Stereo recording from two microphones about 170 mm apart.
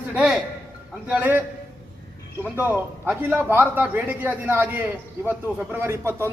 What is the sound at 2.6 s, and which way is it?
A man's voice, 10° right (ahead or behind).